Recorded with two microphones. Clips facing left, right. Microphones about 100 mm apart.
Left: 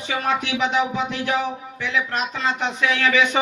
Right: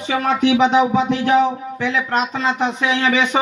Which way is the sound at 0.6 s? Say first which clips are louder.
Right 7 dB; 25° right (ahead or behind).